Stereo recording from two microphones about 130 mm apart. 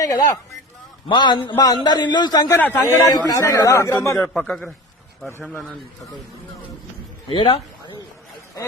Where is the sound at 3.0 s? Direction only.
25° left (ahead or behind).